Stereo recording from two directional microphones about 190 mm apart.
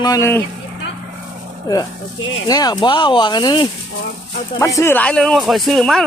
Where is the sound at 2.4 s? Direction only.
20° left (ahead or behind).